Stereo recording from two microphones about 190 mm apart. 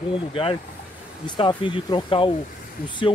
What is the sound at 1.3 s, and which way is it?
Speech, 25° left (ahead or behind).